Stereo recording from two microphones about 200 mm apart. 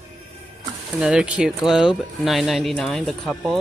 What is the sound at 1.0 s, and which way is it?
Speech, 5° right (ahead or behind).